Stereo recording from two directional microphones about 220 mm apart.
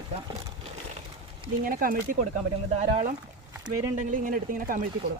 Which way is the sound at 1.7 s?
40° right (ahead or behind).